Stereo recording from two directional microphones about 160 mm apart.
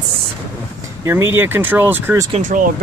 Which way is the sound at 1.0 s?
15° right (ahead or behind).